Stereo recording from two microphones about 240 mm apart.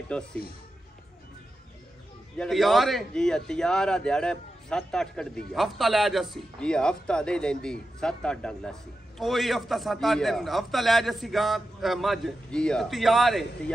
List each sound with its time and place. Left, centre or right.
0.1 s a man's voice: centre
2.3 s a man's voice: centre